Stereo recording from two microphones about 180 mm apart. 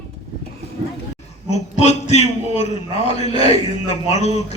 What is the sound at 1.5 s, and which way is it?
A man's voice, 40° left (ahead or behind).